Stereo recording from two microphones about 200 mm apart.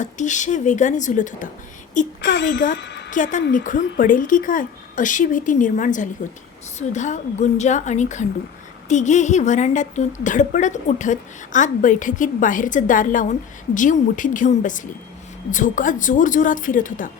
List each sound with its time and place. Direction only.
0.0 s a woman's voice: 40° left (ahead or behind)
2.2 s speech: 60° left (ahead or behind)
2.7 s a sound: 60° left (ahead or behind)
3.1 s a woman's voice: 40° left (ahead or behind)